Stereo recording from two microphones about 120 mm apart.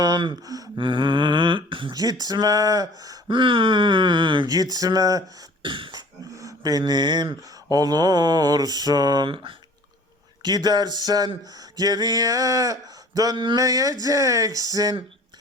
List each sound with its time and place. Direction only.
0.0 s speech: 40° right (ahead or behind)
0.8 s a sound: 45° right (ahead or behind)
3.0 s speech: 35° right (ahead or behind)
5.6 s throat clearing: 45° right (ahead or behind)
5.9 s speech: 30° right (ahead or behind); by 9.6 s 45° right (ahead or behind)
10.4 s speech: 35° right (ahead or behind)
13.3 s a sound: 45° right (ahead or behind)
13.6 s speech: 30° right (ahead or behind)